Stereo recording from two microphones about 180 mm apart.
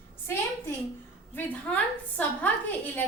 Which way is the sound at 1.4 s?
10° left (ahead or behind).